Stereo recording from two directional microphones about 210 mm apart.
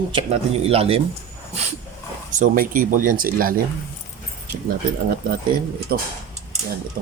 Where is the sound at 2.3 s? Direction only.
40° right (ahead or behind).